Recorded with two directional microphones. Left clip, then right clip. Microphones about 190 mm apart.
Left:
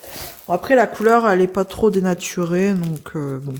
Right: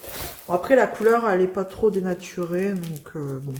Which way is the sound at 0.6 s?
55° left (ahead or behind).